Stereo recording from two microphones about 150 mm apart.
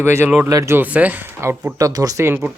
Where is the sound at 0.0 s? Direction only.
15° right (ahead or behind).